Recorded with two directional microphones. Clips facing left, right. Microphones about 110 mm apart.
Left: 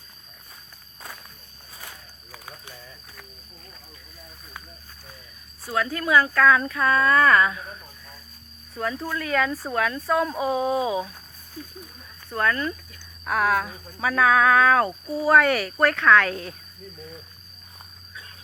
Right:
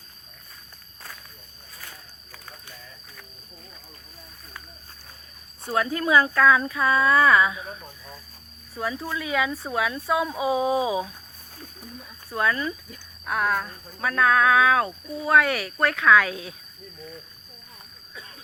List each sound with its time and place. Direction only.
2.3 s a sound: 10° left (ahead or behind)
5.6 s speech: 20° right (ahead or behind)
8.7 s speech: 5° right (ahead or behind)
12.3 s speech: 10° right (ahead or behind)
13.2 s speech: centre (ahead or behind)